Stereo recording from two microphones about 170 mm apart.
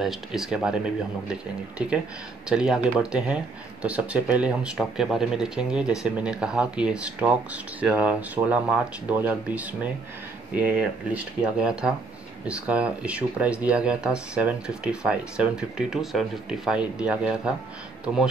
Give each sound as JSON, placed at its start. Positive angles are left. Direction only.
{"t": 0.0, "sound": "speech", "side_deg": 0}
{"t": 2.5, "sound": "speech", "side_deg": -5}